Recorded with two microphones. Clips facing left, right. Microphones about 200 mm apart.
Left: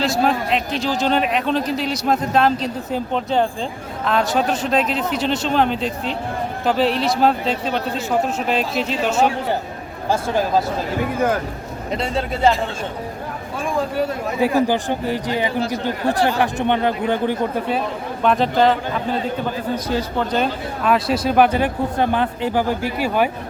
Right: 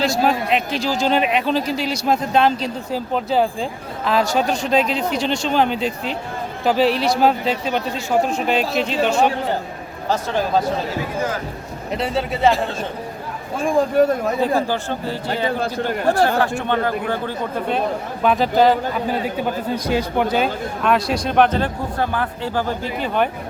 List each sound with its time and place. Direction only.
0.0 s a man's voice: centre (ahead or behind)
11.9 s a man's voice: 5° right (ahead or behind)
14.0 s speech: 50° right (ahead or behind)
14.4 s speech: 15° left (ahead or behind)
16.0 s speech: 45° right (ahead or behind)
16.4 s a man's voice: 20° left (ahead or behind)
17.7 s a man's voice: centre (ahead or behind)
19.7 s a man's voice: 15° right (ahead or behind)
20.4 s speech: centre (ahead or behind)